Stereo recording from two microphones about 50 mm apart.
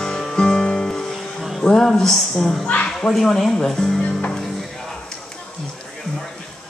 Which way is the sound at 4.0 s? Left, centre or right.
Left.